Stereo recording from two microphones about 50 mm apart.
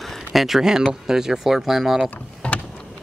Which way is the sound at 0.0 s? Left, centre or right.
Centre.